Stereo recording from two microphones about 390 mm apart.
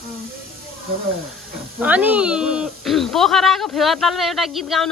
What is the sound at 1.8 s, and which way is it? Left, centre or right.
Speech, centre.